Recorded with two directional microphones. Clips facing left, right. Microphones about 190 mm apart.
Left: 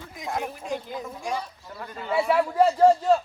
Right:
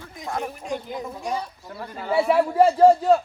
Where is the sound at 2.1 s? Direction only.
30° right (ahead or behind).